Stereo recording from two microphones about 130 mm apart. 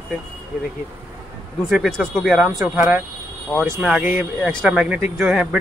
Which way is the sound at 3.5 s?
5° left (ahead or behind).